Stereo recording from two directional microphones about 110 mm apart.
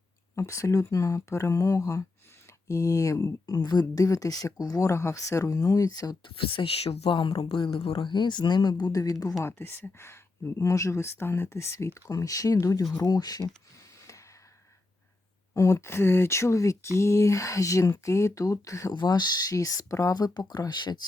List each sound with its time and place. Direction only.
0.3 s speech: 30° left (ahead or behind)
6.3 s speech: 55° left (ahead or behind); by 7.1 s 70° left (ahead or behind)
7.1 s speech: 50° left (ahead or behind); by 9.3 s 35° left (ahead or behind)
9.4 s speech: 20° left (ahead or behind); by 13.5 s 35° left (ahead or behind)
15.5 s speech: 30° left (ahead or behind)